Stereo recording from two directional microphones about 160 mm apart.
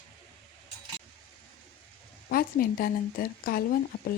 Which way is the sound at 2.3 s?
65° left (ahead or behind).